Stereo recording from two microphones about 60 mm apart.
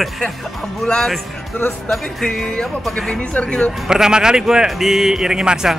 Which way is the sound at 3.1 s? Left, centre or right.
Centre.